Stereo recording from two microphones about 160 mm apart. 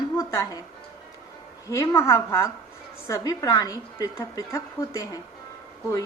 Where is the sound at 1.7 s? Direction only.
20° left (ahead or behind).